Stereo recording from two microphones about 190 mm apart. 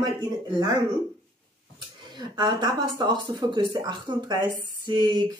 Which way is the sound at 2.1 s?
20° right (ahead or behind).